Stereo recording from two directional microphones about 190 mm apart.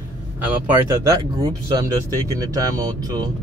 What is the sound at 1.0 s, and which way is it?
Speech, 20° right (ahead or behind).